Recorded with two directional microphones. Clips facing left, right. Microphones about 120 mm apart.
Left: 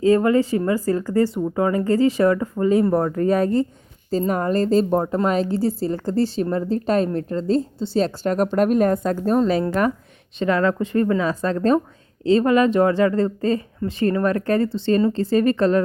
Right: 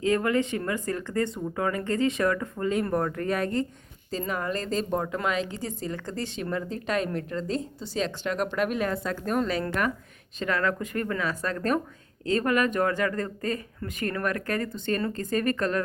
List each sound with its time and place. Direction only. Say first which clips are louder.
0.0 s a woman's voice: left 8 dB; 30° left (ahead or behind)